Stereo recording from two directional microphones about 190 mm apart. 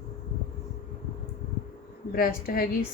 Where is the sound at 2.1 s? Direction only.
50° left (ahead or behind).